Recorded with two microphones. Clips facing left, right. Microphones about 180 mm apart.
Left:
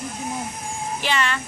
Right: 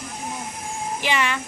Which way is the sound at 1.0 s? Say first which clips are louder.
Even; 15° right (ahead or behind).